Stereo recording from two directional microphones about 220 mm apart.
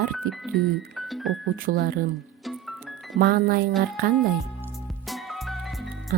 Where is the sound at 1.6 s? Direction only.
45° right (ahead or behind).